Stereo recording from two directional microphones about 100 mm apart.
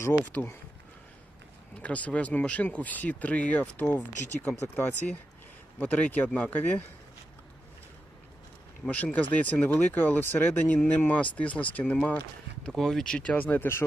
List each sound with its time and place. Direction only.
0.0 s speech: 25° left (ahead or behind)
1.8 s speech: 15° left (ahead or behind)
9.1 s speech: 15° left (ahead or behind)
12.6 s speech: 5° left (ahead or behind); by 13.8 s 20° left (ahead or behind)